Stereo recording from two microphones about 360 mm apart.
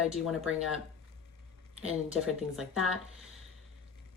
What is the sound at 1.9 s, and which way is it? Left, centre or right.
Speech, centre.